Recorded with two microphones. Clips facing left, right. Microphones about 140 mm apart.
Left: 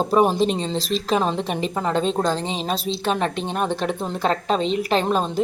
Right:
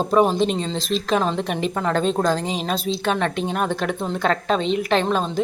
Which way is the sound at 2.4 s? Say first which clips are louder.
Right 1 dB; 30° left (ahead or behind).